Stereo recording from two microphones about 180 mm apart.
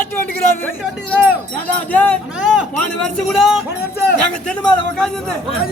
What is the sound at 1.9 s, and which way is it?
Speech, 5° left (ahead or behind).